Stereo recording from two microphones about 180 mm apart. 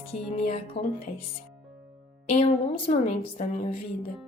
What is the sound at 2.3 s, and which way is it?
A woman's voice, 35° left (ahead or behind).